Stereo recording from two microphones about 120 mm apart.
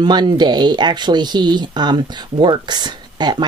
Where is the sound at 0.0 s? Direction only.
35° right (ahead or behind).